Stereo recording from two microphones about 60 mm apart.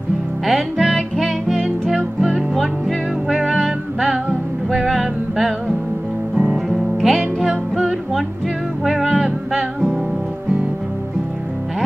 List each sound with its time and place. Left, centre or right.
0.5 s music: centre
2.3 s music: centre
6.3 s music: centre
6.7 s music: centre
7.4 s music: centre
8.8 s music: centre